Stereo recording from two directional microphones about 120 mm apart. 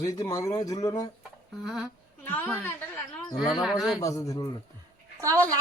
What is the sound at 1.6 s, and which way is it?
Speech, 5° right (ahead or behind).